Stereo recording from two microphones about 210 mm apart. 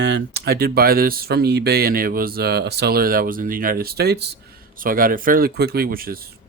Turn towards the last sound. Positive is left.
turn(degrees=-45)  # may be behind; listen again after turning